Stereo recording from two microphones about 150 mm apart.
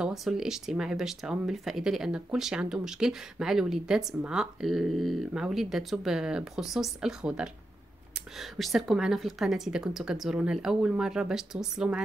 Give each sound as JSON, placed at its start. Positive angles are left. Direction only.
{"t": 0.0, "sound": "speech", "side_deg": 0}